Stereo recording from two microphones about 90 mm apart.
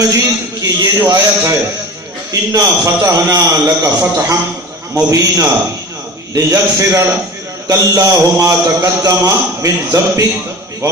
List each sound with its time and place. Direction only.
0.0 s a man's voice: 35° right (ahead or behind)
1.1 s a man's voice: 30° right (ahead or behind)
2.5 s a man's voice: 40° right (ahead or behind)